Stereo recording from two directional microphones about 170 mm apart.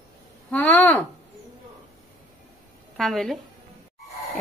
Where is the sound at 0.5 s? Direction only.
10° left (ahead or behind).